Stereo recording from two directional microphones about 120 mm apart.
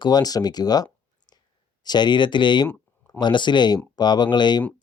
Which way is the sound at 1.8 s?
35° left (ahead or behind).